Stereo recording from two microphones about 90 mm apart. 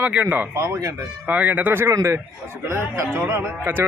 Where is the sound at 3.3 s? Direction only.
25° right (ahead or behind).